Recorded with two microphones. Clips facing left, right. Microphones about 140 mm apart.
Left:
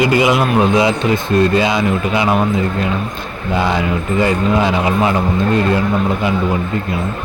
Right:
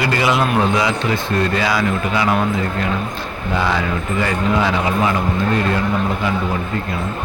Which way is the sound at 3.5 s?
20° left (ahead or behind).